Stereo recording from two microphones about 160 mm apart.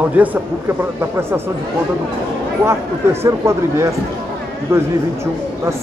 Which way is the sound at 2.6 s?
15° right (ahead or behind).